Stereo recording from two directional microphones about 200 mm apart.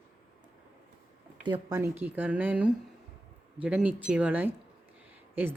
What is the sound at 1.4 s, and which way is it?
Speech, 25° right (ahead or behind).